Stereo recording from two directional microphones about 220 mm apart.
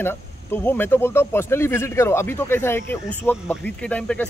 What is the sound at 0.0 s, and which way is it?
Speech, 10° left (ahead or behind).